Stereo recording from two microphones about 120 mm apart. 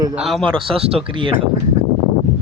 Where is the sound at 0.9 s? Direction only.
45° right (ahead or behind).